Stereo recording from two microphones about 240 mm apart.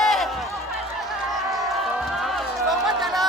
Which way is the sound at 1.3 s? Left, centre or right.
Centre.